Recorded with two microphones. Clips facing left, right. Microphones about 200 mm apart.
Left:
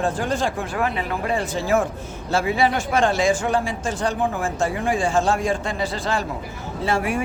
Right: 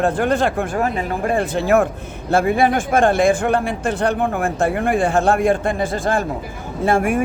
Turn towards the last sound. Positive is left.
turn(degrees=-50)  # may be behind; listen again after turning